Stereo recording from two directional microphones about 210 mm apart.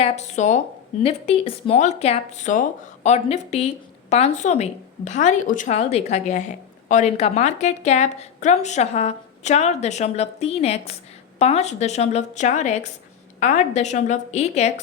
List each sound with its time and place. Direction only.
0.0 s speech: 30° left (ahead or behind)